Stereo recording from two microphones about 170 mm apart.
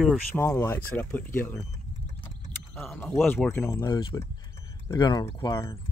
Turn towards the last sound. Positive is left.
turn(degrees=15)  # may be behind; listen again after turning